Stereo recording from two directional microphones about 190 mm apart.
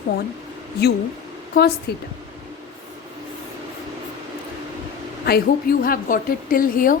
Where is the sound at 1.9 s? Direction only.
60° left (ahead or behind).